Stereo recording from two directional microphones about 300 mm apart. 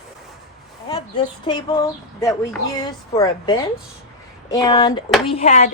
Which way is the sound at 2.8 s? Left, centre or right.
Centre.